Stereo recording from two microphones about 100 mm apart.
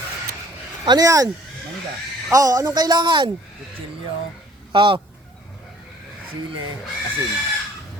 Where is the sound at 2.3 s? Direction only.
35° right (ahead or behind).